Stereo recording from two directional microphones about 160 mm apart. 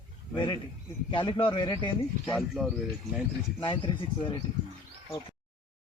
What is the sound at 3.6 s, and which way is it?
Speech, 30° left (ahead or behind).